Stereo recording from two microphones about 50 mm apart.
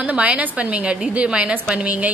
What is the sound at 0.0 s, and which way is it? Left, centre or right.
A woman's voice, right.